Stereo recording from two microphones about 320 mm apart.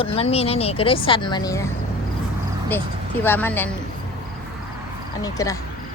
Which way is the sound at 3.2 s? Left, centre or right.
Centre.